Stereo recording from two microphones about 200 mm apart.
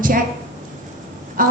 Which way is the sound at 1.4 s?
45° right (ahead or behind).